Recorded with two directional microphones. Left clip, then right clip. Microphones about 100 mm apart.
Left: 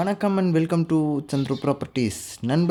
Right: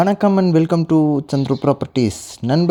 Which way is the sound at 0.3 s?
45° right (ahead or behind).